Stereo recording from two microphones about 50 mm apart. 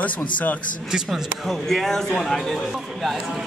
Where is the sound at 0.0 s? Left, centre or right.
Left.